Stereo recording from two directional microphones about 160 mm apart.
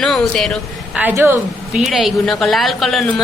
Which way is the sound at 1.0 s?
10° right (ahead or behind).